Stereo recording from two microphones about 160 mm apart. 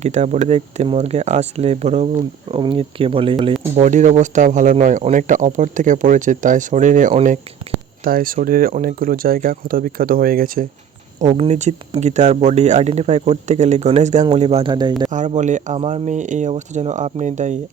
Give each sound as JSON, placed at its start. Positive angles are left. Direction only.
{"t": 0.0, "sound": "speech", "side_deg": -45}
{"t": 2.5, "sound": "speech", "side_deg": -30}
{"t": 3.8, "sound": "speech", "side_deg": -50}
{"t": 8.0, "sound": "speech", "side_deg": -65}
{"t": 11.3, "sound": "speech", "side_deg": -40}
{"t": 15.1, "sound": "speech", "side_deg": -50}